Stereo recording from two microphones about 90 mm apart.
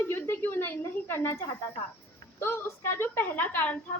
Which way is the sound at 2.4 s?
25° left (ahead or behind).